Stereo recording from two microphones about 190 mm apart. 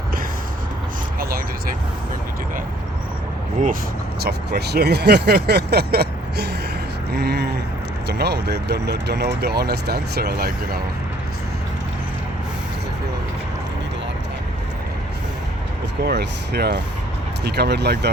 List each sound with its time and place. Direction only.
1.2 s vehicle: 50° right (ahead or behind)
4.2 s speech: 60° right (ahead or behind)
16.0 s speech: 60° right (ahead or behind)